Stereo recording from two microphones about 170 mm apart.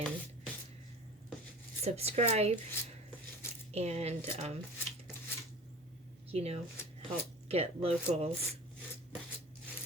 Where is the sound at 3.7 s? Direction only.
40° right (ahead or behind).